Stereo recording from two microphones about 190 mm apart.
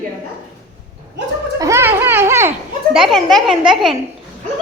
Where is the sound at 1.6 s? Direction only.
15° right (ahead or behind).